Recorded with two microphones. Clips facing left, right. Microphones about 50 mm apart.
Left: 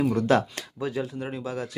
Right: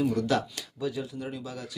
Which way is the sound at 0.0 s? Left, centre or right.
Left.